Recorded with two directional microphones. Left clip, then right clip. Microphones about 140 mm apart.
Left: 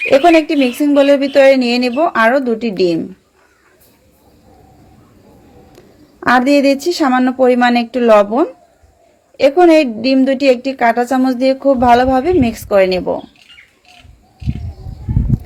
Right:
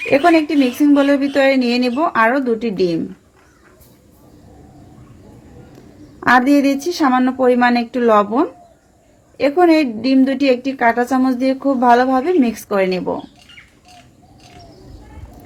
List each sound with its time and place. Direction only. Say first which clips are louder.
0.0 s a woman's voice: left 4 dB; 45° left (ahead or behind)
6.1 s a woman's voice: left 2 dB; 50° left (ahead or behind)